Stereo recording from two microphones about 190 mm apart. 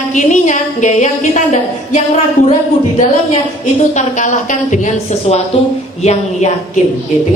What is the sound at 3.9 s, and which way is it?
A woman's voice, 40° left (ahead or behind).